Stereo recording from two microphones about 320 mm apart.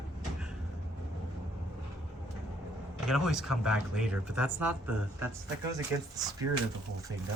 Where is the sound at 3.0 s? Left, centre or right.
Centre.